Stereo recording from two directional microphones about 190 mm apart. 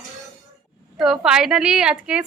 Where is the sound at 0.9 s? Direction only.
Centre (ahead or behind).